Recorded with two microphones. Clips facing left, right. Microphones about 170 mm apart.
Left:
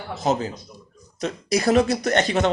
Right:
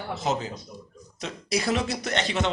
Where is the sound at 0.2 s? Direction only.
45° left (ahead or behind).